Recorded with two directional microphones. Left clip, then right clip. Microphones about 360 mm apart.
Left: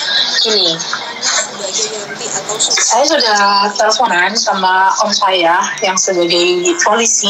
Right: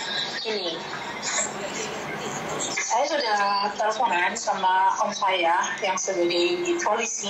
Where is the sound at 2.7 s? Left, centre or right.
Left.